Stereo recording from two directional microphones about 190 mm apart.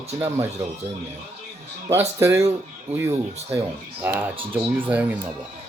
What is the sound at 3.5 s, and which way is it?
Speech, 10° right (ahead or behind).